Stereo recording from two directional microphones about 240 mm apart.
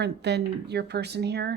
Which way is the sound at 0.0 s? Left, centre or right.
Right.